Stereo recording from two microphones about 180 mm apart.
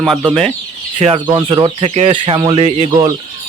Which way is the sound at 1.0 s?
30° right (ahead or behind).